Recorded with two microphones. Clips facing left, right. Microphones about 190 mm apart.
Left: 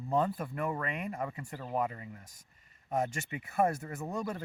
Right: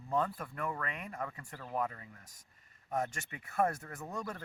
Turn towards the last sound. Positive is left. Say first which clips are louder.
# left 5 dB
turn(degrees=15)  # may be behind; listen again after turning